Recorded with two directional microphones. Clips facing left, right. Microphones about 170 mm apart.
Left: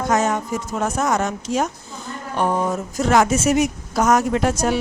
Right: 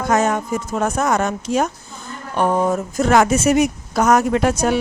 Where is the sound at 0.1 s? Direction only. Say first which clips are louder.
Right 3 dB; 55° right (ahead or behind).